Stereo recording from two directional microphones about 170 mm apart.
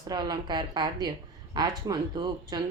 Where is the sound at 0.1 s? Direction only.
25° right (ahead or behind).